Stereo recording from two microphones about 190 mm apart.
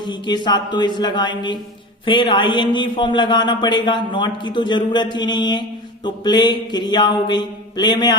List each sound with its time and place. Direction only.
0.1 s a man's voice: 25° left (ahead or behind)